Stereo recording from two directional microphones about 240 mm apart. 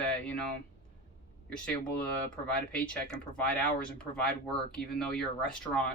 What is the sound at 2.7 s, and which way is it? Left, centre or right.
Speech, centre.